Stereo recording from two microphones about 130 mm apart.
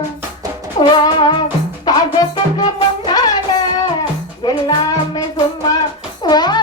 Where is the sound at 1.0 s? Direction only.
35° left (ahead or behind).